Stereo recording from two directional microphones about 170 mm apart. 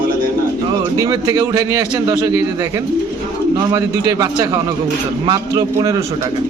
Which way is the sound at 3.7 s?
20° right (ahead or behind).